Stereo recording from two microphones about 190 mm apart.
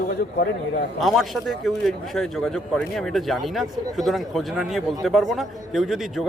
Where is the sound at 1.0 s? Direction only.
Centre (ahead or behind).